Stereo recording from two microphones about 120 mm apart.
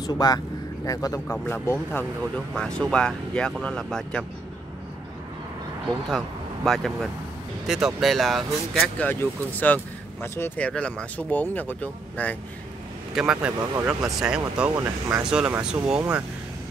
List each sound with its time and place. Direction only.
0.0 s speech: 35° left (ahead or behind)
1.2 s speech: 15° left (ahead or behind)
2.5 s speech: 5° left (ahead or behind)
6.0 s speech: centre (ahead or behind)
9.0 s speech: 15° left (ahead or behind)
13.1 s speech: 10° right (ahead or behind)
14.8 s speech: 20° right (ahead or behind)
15.2 s speech: 5° right (ahead or behind)